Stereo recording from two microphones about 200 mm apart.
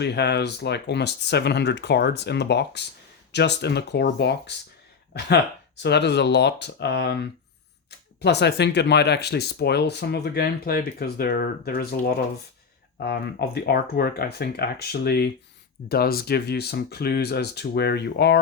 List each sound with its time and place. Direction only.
0.0 s speech: 55° left (ahead or behind)